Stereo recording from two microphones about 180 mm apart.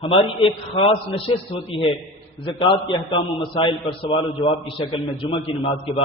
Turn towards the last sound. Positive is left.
turn(degrees=30)  # may be behind; listen again after turning